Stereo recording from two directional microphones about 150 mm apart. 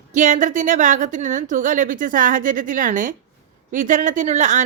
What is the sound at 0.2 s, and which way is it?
A woman's voice, 55° right (ahead or behind).